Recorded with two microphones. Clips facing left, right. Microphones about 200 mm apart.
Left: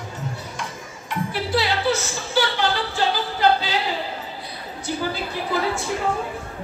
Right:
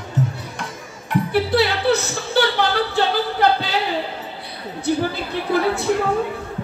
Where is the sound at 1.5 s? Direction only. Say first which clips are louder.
Right 2 dB; 60° right (ahead or behind).